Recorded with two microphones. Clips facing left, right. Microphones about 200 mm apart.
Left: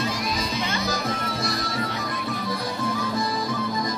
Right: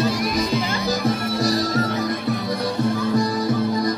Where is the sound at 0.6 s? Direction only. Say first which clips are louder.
Right 5 dB; 35° right (ahead or behind).